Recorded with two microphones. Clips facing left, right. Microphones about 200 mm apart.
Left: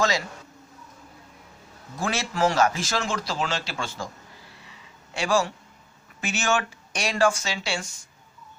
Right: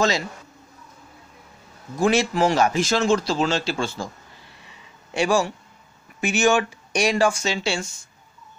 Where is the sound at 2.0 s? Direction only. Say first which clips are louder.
Right 7 dB; 15° right (ahead or behind).